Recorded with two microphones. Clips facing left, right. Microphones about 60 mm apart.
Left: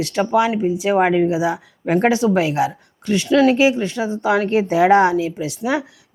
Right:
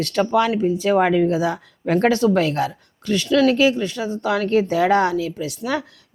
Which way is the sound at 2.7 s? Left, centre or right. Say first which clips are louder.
Left 2 dB; left.